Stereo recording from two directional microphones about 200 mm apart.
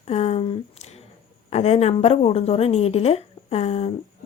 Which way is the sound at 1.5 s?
30° left (ahead or behind).